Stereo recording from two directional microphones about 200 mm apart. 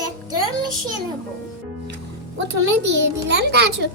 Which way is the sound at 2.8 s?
60° right (ahead or behind).